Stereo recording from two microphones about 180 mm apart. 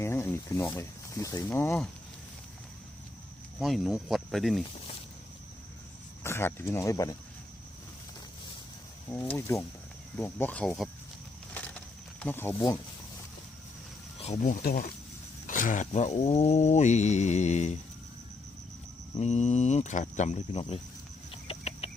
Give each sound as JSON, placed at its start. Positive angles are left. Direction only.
{"t": 0.0, "sound": "speech", "side_deg": 15}
{"t": 3.6, "sound": "speech", "side_deg": 0}
{"t": 6.2, "sound": "speech", "side_deg": 15}
{"t": 9.3, "sound": "speech", "side_deg": 10}
{"t": 12.2, "sound": "speech", "side_deg": 10}
{"t": 14.2, "sound": "speech", "side_deg": 40}
{"t": 15.4, "sound": "a sound", "side_deg": 45}
{"t": 19.2, "sound": "a sound", "side_deg": 40}
{"t": 20.5, "sound": "speech", "side_deg": 30}
{"t": 21.4, "sound": "a sound", "side_deg": 35}